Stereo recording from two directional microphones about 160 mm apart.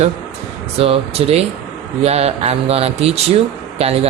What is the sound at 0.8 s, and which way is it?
Speech, 40° right (ahead or behind).